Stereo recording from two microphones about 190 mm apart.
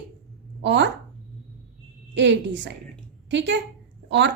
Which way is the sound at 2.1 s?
70° right (ahead or behind).